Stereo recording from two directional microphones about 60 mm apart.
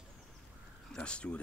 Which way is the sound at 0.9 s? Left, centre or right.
Centre.